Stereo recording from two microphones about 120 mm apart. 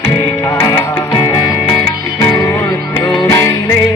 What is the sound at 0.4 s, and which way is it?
Music, 30° left (ahead or behind).